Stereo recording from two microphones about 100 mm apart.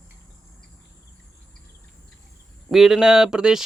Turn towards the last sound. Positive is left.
turn(degrees=-5)  # may be behind; listen again after turning